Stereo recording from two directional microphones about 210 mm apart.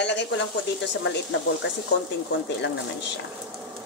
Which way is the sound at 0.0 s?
55° left (ahead or behind).